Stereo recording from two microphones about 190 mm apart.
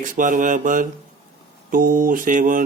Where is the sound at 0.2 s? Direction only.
45° right (ahead or behind).